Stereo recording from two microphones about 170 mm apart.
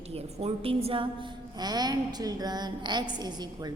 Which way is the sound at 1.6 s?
25° right (ahead or behind).